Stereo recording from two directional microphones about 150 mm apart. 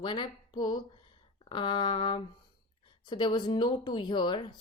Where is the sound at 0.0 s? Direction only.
30° left (ahead or behind).